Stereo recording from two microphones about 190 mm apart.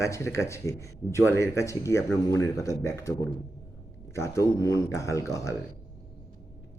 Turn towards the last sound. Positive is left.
turn(degrees=15)  # may be behind; listen again after turning